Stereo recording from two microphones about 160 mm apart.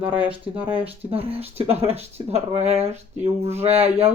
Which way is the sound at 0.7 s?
35° right (ahead or behind).